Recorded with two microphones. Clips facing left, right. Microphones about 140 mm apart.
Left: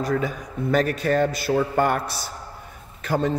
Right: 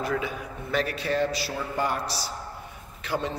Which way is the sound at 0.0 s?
40° left (ahead or behind).